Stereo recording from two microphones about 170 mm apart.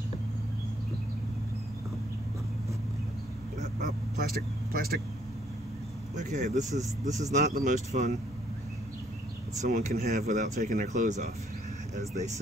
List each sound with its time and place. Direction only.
3.5 s speech: 50° right (ahead or behind)
6.1 s speech: 45° right (ahead or behind)
9.7 s speech: 45° right (ahead or behind)